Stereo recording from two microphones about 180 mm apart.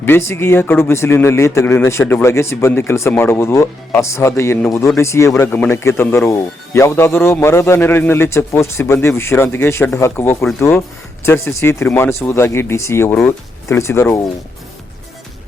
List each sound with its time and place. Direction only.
0.0 s a man's voice: 15° left (ahead or behind)